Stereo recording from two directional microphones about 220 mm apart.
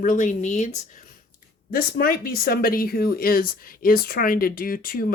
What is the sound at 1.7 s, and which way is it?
Speech, 40° left (ahead or behind).